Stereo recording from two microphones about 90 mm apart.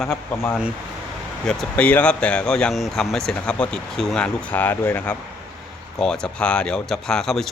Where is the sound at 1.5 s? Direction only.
15° left (ahead or behind).